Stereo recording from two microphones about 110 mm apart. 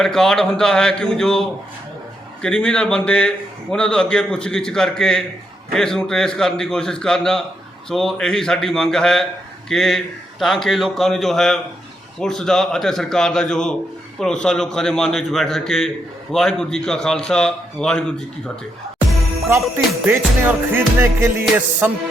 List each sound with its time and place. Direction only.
0.0 s a man's voice: 5° left (ahead or behind)
19.7 s music: 20° right (ahead or behind)